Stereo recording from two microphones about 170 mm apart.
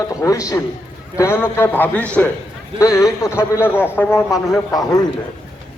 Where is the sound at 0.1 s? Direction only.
20° left (ahead or behind).